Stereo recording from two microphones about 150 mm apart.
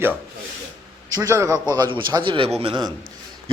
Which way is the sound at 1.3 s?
20° right (ahead or behind).